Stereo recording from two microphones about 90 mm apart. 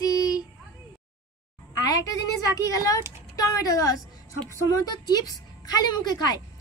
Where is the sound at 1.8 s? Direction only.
45° left (ahead or behind).